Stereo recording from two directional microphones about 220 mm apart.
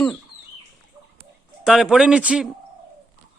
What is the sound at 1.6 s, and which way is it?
Speech, centre (ahead or behind).